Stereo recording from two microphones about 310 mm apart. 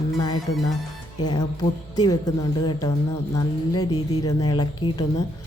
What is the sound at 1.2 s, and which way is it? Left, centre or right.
A woman's voice, centre.